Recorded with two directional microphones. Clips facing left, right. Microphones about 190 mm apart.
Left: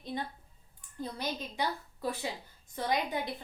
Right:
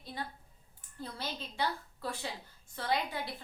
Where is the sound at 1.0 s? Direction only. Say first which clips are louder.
Left 4 dB; 15° left (ahead or behind).